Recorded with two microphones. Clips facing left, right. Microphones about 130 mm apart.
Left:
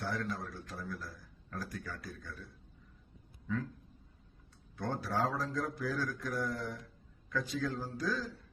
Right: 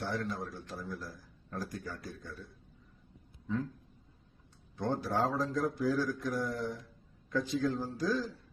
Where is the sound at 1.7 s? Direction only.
35° right (ahead or behind).